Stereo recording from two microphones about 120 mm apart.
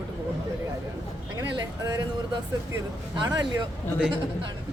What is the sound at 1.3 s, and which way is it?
Speech, 30° right (ahead or behind).